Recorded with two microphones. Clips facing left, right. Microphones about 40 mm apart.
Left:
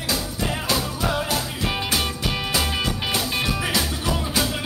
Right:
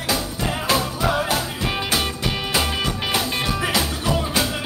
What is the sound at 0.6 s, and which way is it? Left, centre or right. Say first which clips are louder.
Music: right 5 dB; right.